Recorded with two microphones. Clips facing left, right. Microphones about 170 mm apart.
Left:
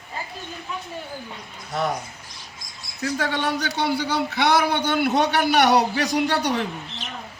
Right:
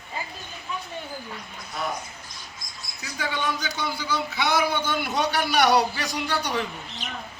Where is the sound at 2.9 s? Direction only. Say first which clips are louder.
Left 6 dB; 70° left (ahead or behind).